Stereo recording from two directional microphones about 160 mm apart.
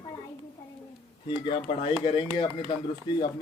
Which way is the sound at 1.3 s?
30° left (ahead or behind).